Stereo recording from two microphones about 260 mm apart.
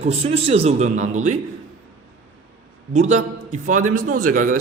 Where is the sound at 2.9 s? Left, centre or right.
Right.